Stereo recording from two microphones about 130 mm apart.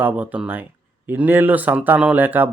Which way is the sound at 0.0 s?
10° right (ahead or behind).